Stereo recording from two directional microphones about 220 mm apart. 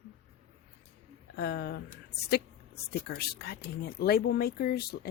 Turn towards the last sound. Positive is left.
turn(degrees=45)  # may be behind; listen again after turning